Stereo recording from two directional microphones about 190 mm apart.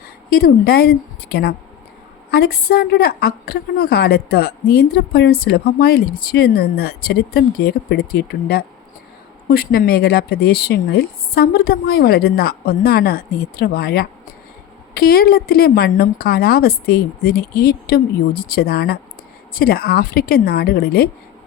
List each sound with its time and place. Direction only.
0.3 s a woman's voice: 50° left (ahead or behind)